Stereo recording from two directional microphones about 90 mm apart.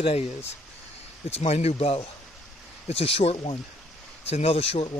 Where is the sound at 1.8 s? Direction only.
90° left.